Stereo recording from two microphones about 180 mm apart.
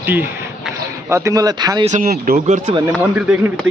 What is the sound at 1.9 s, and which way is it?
Speech, 50° right (ahead or behind).